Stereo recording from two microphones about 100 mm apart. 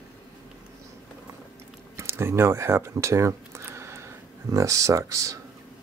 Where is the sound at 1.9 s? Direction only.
25° right (ahead or behind).